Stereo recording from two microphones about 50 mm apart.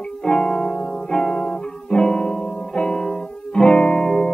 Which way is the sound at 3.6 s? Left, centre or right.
Centre.